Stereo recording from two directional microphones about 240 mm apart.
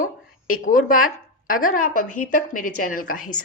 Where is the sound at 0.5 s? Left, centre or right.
Left.